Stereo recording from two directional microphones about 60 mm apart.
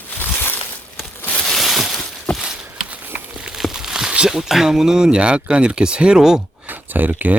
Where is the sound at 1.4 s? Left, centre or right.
Centre.